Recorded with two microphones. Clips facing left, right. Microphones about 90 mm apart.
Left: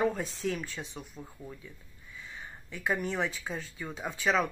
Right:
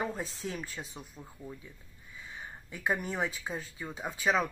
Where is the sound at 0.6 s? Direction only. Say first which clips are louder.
Left 2 dB; 40° right (ahead or behind).